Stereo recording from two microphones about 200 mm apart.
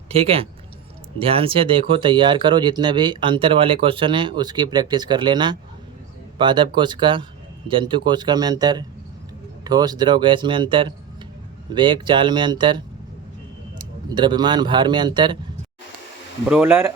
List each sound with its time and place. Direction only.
0.1 s speech: 30° right (ahead or behind)
16.5 s speech: 10° right (ahead or behind)